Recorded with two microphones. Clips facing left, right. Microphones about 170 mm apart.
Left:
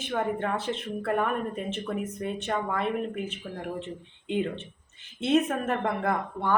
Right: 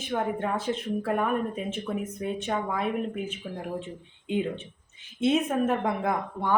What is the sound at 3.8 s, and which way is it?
Speech, 60° left (ahead or behind).